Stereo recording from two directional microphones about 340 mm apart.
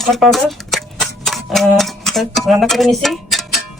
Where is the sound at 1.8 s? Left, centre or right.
Centre.